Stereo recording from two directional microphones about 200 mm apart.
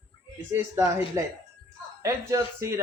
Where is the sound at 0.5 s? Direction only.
10° right (ahead or behind).